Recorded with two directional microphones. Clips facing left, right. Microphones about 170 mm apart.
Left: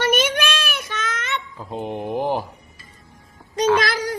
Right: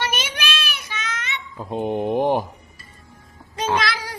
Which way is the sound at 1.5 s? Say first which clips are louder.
Right 4 dB; 20° right (ahead or behind).